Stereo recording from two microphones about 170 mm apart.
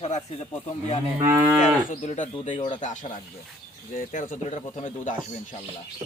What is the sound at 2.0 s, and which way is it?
Speech, 40° left (ahead or behind).